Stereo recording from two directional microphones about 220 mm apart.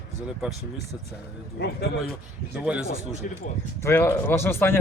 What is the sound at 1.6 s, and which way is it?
Speech, 45° left (ahead or behind).